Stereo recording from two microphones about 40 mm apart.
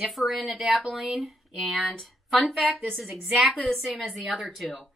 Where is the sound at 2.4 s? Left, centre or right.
Centre.